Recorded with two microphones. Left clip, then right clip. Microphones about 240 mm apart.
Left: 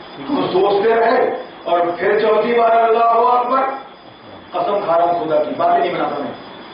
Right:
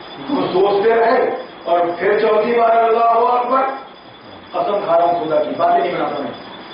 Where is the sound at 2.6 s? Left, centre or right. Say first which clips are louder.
Even; centre.